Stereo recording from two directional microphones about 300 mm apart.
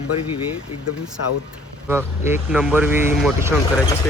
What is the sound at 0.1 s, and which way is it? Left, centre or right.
Speech, left.